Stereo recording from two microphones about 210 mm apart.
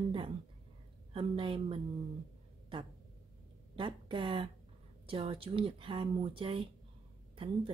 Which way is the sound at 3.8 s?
25° right (ahead or behind).